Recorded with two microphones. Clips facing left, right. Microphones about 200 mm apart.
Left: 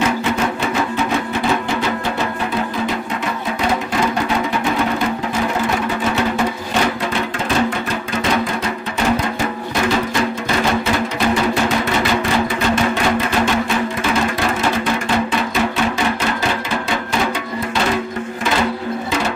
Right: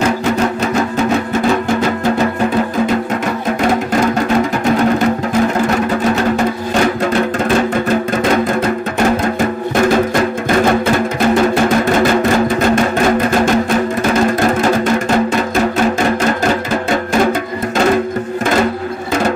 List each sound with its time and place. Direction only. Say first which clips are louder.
10.6 s music: right 5 dB; 50° right (ahead or behind)
15.5 s music: right 5 dB; 45° right (ahead or behind)